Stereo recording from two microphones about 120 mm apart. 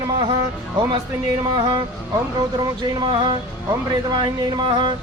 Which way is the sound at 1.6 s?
40° right (ahead or behind).